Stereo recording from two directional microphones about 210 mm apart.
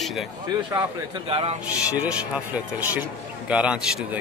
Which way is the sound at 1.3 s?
25° right (ahead or behind).